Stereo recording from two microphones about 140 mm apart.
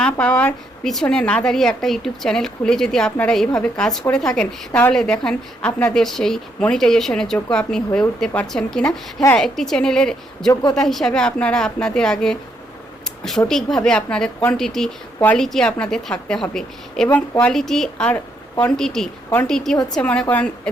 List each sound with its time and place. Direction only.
0.0 s a woman's voice: 10° left (ahead or behind)
10.5 s a woman's voice: 30° left (ahead or behind)
10.8 s a woman's voice: centre (ahead or behind)
13.5 s a woman's voice: centre (ahead or behind)